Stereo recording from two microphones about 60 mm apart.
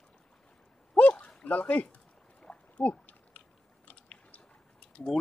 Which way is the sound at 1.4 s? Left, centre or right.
Left.